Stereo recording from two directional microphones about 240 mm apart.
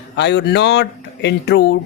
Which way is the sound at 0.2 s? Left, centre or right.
Left.